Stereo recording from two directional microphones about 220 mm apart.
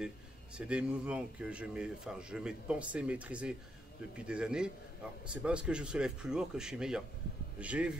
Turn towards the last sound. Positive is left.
turn(degrees=-5)  # may be behind; listen again after turning